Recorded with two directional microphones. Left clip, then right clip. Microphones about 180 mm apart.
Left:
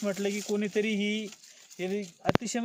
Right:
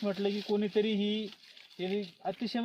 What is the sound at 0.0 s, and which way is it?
Speech, 10° left (ahead or behind).